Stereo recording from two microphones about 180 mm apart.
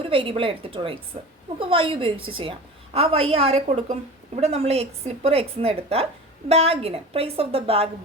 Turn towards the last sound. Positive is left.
turn(degrees=-30)  # may be behind; listen again after turning